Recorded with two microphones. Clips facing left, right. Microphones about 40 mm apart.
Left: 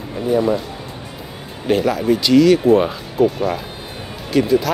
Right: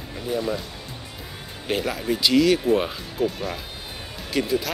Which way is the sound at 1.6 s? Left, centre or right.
Centre.